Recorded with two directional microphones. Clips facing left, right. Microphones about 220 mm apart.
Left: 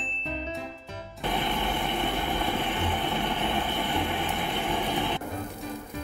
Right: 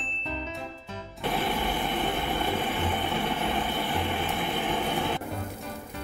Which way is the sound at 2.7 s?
Centre (ahead or behind).